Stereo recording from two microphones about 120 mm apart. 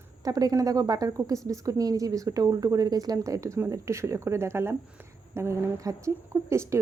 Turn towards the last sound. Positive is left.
turn(degrees=-25)  # may be behind; listen again after turning